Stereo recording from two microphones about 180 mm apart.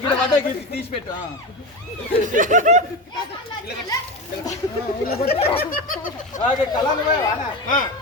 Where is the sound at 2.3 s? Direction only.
45° right (ahead or behind).